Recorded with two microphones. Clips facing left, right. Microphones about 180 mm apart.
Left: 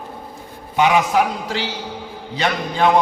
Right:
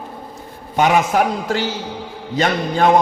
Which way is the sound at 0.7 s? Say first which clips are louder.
Right 1 dB; 45° right (ahead or behind).